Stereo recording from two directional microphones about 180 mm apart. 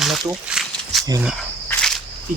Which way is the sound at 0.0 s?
Centre (ahead or behind).